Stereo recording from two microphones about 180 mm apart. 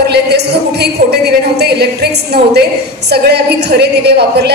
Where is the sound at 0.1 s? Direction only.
65° right (ahead or behind).